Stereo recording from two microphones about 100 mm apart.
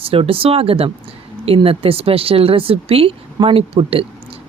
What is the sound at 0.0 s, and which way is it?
A woman's voice, 70° right (ahead or behind).